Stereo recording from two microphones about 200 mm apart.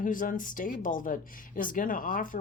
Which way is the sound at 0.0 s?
40° left (ahead or behind).